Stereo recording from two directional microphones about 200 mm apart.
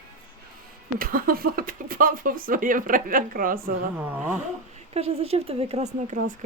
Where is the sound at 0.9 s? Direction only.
45° right (ahead or behind).